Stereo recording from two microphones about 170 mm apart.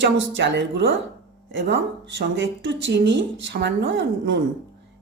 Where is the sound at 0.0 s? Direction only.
90° right.